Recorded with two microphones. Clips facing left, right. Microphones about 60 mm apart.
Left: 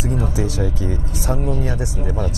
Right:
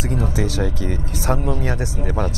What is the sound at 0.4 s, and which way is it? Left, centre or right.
Speech, right.